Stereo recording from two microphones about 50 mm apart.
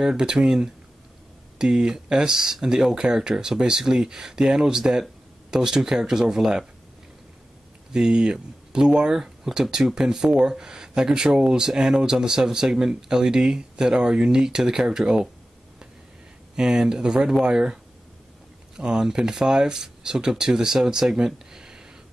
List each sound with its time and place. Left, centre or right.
0.0 s speech: centre
1.6 s speech: centre
7.9 s speech: centre
16.5 s speech: centre
18.8 s speech: centre